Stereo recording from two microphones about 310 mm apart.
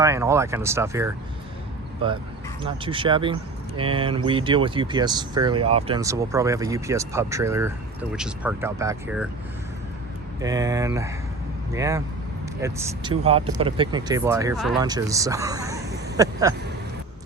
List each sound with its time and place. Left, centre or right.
0.0 s speech: centre
2.6 s speech: centre
10.4 s speech: centre
14.8 s speech: centre